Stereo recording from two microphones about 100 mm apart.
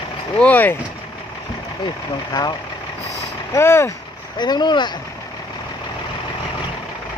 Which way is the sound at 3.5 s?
25° left (ahead or behind).